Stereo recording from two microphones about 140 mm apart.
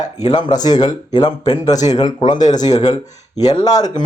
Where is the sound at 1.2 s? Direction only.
30° left (ahead or behind).